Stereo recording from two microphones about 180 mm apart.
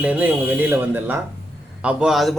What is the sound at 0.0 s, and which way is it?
A man's voice, 10° right (ahead or behind).